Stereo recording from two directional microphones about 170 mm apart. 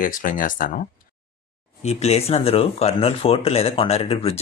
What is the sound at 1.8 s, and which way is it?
Speech, 40° left (ahead or behind).